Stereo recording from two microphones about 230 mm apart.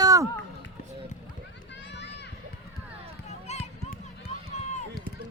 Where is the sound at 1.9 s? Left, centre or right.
Left.